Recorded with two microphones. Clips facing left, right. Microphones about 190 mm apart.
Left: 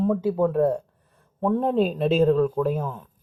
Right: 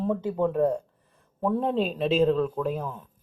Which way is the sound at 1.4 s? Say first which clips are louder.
Left 4 dB; 5° right (ahead or behind).